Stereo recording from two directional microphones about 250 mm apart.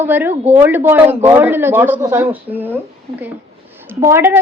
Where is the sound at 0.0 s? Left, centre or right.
Centre.